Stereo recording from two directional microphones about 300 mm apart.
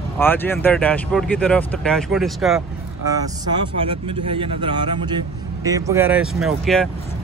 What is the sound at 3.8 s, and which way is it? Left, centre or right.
Speech, centre.